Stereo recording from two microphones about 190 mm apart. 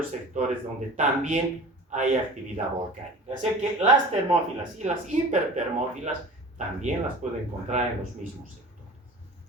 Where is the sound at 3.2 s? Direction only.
40° right (ahead or behind).